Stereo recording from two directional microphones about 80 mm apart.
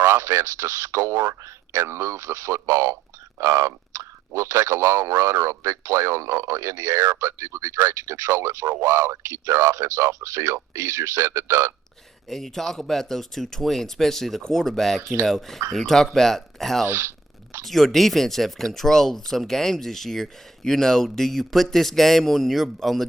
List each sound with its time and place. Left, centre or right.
0.0 s speech: right
12.3 s speech: centre
16.8 s a sound: right
17.7 s speech: centre